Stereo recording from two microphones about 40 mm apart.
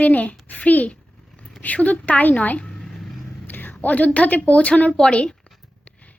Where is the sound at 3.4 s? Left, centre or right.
Left.